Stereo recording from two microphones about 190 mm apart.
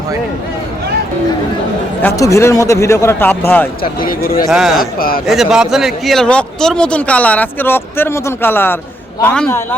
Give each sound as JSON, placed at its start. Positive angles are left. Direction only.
{"t": 2.0, "sound": "a man's voice", "side_deg": 15}
{"t": 4.0, "sound": "speech", "side_deg": 50}
{"t": 4.4, "sound": "speech", "side_deg": 0}
{"t": 4.8, "sound": "speech", "side_deg": 50}
{"t": 5.2, "sound": "a man's voice", "side_deg": 0}